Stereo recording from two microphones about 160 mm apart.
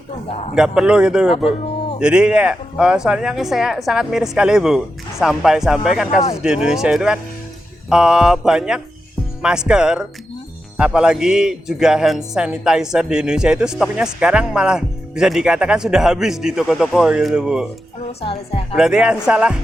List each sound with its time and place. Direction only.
0.5 s a man's voice: 5° right (ahead or behind)
18.2 s a woman's voice: 40° left (ahead or behind)
18.8 s a man's voice: 5° right (ahead or behind)